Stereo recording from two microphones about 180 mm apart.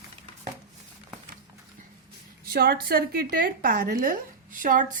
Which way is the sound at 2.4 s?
60° right (ahead or behind).